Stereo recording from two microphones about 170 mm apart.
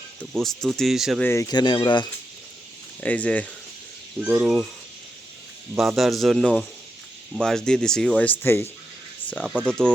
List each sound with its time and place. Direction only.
0.4 s speech: centre (ahead or behind)
1.2 s speech: 15° left (ahead or behind)
3.0 s speech: 10° left (ahead or behind)
4.2 s speech: 10° right (ahead or behind)
6.0 s speech: centre (ahead or behind)
9.3 s speech: centre (ahead or behind)